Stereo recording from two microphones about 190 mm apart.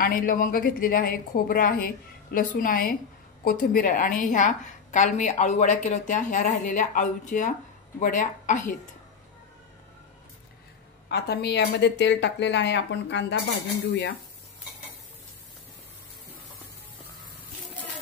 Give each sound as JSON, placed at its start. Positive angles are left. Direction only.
{"t": 0.0, "sound": "a woman's voice", "side_deg": 50}
{"t": 11.1, "sound": "speech", "side_deg": 60}